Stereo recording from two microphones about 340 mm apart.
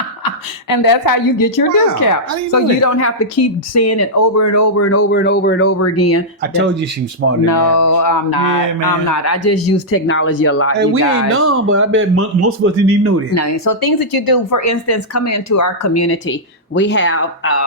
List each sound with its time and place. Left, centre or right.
0.3 s a woman's voice: left
3.0 s speech: left
5.1 s speech: left
7.4 s speech: left
10.8 s speech: right
13.3 s speech: left
13.8 s speech: left
14.6 s speech: left
16.7 s speech: left